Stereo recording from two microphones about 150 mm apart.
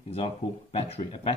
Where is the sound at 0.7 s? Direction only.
40° left (ahead or behind).